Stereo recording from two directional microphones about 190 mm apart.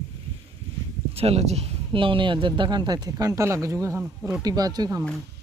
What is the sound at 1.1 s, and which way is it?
Speech, 35° right (ahead or behind).